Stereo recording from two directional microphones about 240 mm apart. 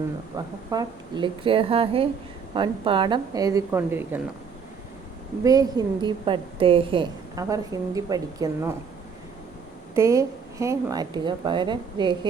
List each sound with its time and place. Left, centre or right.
0.3 s a woman's voice: centre
5.4 s a woman's voice: centre
9.9 s a woman's voice: centre